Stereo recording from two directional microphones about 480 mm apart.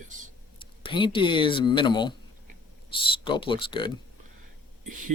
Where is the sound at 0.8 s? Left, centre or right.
Centre.